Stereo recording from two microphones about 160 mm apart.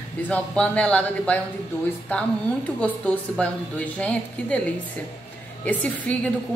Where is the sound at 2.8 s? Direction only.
5° left (ahead or behind).